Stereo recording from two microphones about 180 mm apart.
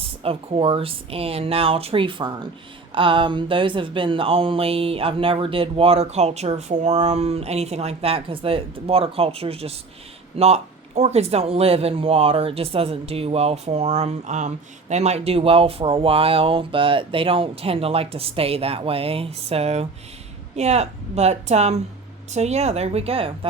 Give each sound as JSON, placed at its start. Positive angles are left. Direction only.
{"t": 0.0, "sound": "speech", "side_deg": -30}